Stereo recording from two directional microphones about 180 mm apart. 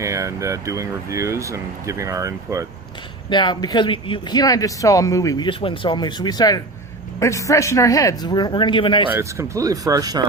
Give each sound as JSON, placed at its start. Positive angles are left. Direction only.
{"t": 0.0, "sound": "speech", "side_deg": -15}
{"t": 3.2, "sound": "a man's voice", "side_deg": 25}
{"t": 9.1, "sound": "speech", "side_deg": -15}